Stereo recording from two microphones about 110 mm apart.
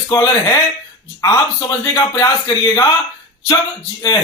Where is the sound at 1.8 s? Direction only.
30° left (ahead or behind).